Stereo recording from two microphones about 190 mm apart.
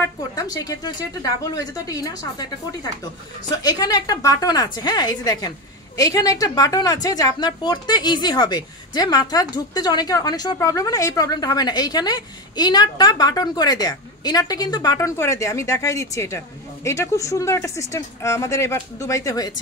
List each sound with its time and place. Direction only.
0.4 s a woman's voice: 20° left (ahead or behind)